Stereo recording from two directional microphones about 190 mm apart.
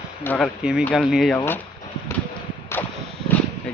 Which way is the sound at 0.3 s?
5° left (ahead or behind).